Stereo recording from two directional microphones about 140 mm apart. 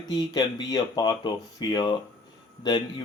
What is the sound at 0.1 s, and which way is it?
Speech, 30° left (ahead or behind).